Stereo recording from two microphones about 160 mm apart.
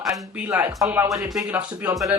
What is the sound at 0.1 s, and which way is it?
Speech, 10° right (ahead or behind).